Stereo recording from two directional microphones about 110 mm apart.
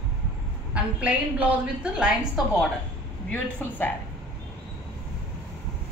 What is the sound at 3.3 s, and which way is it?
Speech, 15° left (ahead or behind).